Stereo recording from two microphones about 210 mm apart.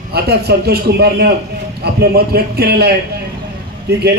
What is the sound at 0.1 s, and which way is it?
A man's voice, 50° right (ahead or behind).